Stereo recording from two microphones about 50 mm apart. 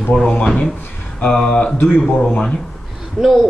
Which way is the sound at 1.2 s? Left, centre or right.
Centre.